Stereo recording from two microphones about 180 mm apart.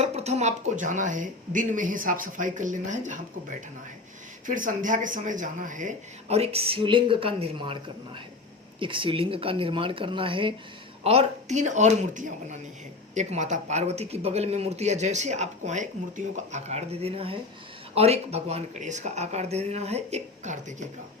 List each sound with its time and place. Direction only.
0.0 s speech: 35° right (ahead or behind)
4.4 s speech: 45° right (ahead or behind)